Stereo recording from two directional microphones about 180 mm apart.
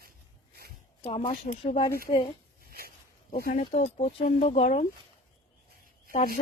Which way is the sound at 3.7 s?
40° left (ahead or behind).